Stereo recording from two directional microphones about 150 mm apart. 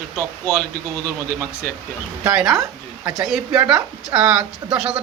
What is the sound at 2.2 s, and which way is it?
A man's voice, 5° right (ahead or behind).